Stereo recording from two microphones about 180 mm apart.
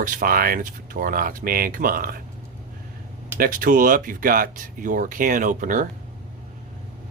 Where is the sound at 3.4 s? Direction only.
50° right (ahead or behind).